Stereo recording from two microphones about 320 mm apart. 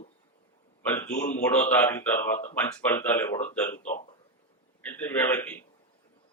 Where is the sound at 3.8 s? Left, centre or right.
Left.